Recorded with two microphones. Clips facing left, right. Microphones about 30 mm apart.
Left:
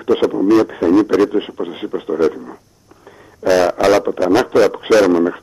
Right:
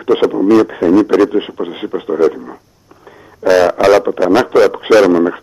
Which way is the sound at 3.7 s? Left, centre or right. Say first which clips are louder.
Right 3 dB; centre.